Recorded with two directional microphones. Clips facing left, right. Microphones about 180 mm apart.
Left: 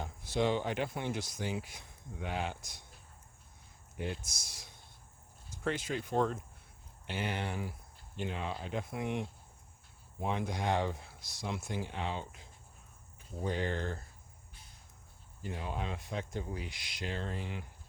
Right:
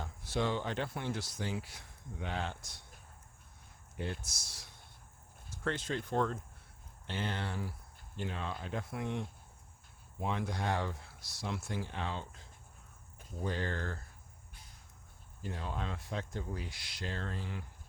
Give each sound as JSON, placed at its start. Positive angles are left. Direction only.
{"t": 0.0, "sound": "speech", "side_deg": 15}
{"t": 4.3, "sound": "speech", "side_deg": 15}
{"t": 10.2, "sound": "speech", "side_deg": 20}
{"t": 13.5, "sound": "speech", "side_deg": 15}
{"t": 15.5, "sound": "speech", "side_deg": 15}